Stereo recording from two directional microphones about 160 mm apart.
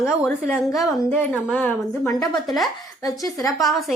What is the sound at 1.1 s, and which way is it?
A woman's voice, 10° left (ahead or behind).